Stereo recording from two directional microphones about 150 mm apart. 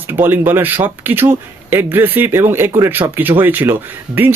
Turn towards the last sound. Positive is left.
turn(degrees=-15)  # may be behind; listen again after turning